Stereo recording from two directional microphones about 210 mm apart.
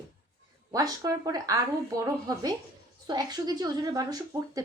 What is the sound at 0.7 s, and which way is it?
A woman's voice, 15° right (ahead or behind).